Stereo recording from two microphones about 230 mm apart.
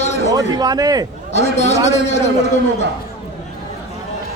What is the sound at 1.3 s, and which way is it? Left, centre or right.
Speech, left.